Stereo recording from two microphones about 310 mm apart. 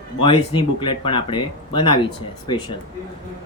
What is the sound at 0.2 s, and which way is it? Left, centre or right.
Speech, centre.